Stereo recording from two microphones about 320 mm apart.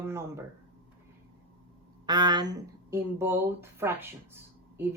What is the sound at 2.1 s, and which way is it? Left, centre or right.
Speech, centre.